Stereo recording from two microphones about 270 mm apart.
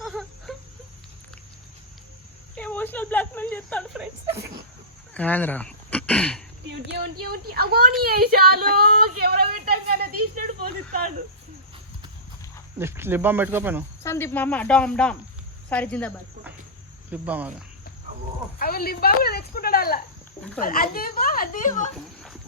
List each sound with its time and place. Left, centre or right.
0.0 s a sound: centre
2.6 s speech: centre
5.1 s speech: centre
7.5 s a woman's voice: right
10.3 s a sound: right
12.8 s speech: centre
14.0 s speech: centre
18.6 s a sound: left
20.6 s a woman's voice: left